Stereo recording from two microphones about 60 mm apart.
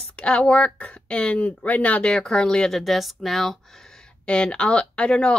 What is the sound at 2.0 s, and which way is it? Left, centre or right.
A woman's voice, centre.